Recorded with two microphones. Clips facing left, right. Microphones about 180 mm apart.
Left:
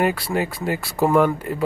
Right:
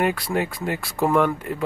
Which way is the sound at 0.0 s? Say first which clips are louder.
Left 1 dB; centre (ahead or behind).